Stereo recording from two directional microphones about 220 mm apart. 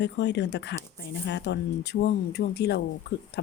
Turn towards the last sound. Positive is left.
turn(degrees=50)  # may be behind; listen again after turning